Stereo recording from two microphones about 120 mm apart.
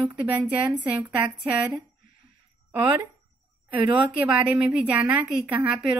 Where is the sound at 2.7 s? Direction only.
15° right (ahead or behind).